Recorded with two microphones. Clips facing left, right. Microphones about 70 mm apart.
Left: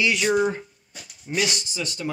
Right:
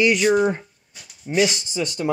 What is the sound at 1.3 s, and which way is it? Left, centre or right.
Speech, right.